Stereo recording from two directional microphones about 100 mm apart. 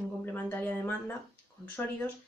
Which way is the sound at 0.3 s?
20° left (ahead or behind).